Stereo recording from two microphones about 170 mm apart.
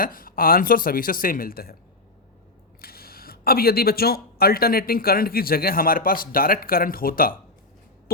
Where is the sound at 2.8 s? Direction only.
60° left (ahead or behind).